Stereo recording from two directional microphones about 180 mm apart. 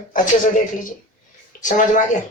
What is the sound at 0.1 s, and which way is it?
Speech, 50° left (ahead or behind).